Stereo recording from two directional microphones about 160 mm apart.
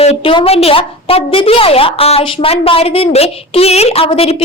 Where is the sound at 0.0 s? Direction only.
35° left (ahead or behind).